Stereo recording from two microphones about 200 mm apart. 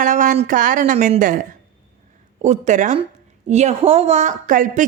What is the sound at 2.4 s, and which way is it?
Speech, 35° right (ahead or behind).